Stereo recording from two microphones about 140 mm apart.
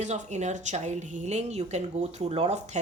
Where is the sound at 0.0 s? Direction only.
55° right (ahead or behind).